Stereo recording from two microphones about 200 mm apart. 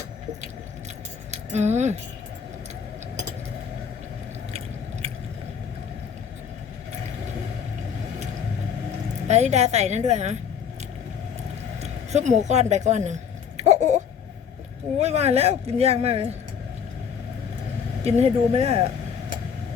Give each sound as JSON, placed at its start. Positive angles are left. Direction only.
{"t": 1.3, "sound": "speech", "side_deg": -35}
{"t": 9.2, "sound": "speech", "side_deg": -35}
{"t": 11.8, "sound": "speech", "side_deg": -35}
{"t": 13.6, "sound": "a sound", "side_deg": -35}
{"t": 14.9, "sound": "speech", "side_deg": -35}
{"t": 18.0, "sound": "speech", "side_deg": -30}